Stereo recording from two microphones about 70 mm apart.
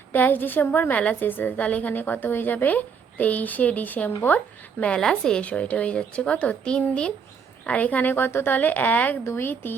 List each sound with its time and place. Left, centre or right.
0.1 s a woman's voice: left
4.8 s a woman's voice: centre; by 9.7 s left